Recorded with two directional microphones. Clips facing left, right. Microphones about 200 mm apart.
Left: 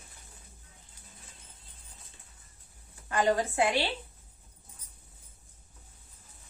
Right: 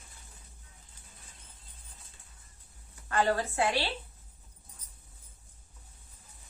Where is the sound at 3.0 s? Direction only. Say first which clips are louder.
Left 2 dB; 15° left (ahead or behind).